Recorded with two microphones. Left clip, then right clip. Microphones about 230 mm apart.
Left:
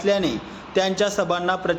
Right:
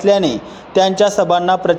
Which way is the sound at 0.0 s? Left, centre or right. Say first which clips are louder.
Right 8 dB; right.